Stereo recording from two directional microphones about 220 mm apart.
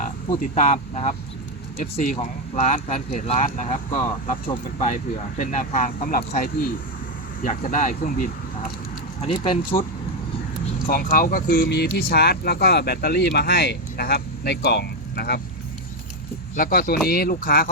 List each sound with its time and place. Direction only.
0.3 s speech: 30° left (ahead or behind)
2.6 s speech: 30° left (ahead or behind)
10.8 s speech: 40° left (ahead or behind)
16.6 s speech: 40° left (ahead or behind)